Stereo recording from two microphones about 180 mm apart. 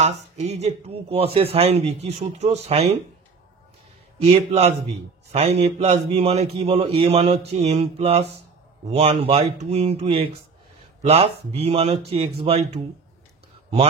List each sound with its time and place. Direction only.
0.0 s speech: 35° right (ahead or behind)
4.2 s speech: 35° right (ahead or behind)